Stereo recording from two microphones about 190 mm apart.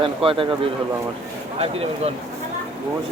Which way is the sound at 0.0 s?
30° right (ahead or behind).